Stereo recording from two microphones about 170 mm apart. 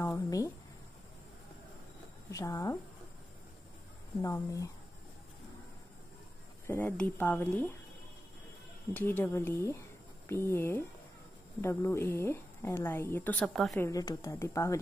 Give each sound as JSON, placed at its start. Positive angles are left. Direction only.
{"t": 0.0, "sound": "speech", "side_deg": 20}
{"t": 2.3, "sound": "speech", "side_deg": 20}
{"t": 4.2, "sound": "speech", "side_deg": 20}
{"t": 6.7, "sound": "a woman's voice", "side_deg": 10}
{"t": 8.9, "sound": "a woman's voice", "side_deg": 10}
{"t": 13.7, "sound": "a woman's voice", "side_deg": 20}